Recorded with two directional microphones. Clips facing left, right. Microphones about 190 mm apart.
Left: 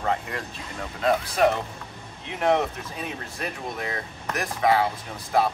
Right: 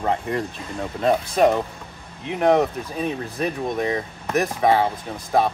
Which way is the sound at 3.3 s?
25° right (ahead or behind).